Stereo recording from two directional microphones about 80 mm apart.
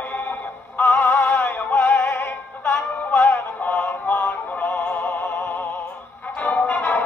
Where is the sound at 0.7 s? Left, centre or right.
Left.